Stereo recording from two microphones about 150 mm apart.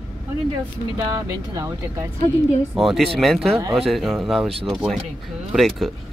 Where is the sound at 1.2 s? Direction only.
20° right (ahead or behind).